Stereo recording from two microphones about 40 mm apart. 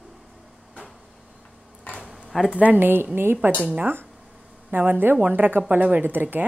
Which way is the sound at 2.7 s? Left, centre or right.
Right.